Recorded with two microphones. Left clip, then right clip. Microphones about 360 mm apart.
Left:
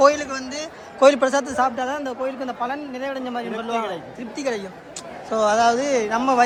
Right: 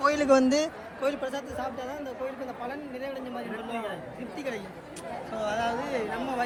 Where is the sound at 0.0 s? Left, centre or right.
Centre.